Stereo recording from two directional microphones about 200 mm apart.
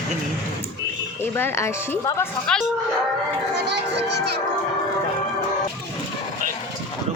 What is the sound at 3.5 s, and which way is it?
Speech, 55° right (ahead or behind).